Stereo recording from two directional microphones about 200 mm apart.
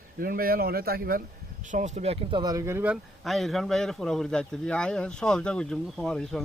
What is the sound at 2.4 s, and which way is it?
A man's voice, 15° right (ahead or behind).